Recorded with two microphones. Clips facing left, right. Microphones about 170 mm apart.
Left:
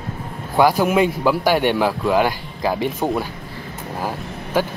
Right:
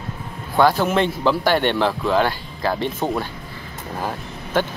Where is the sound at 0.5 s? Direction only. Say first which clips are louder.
Left 2 dB; 10° left (ahead or behind).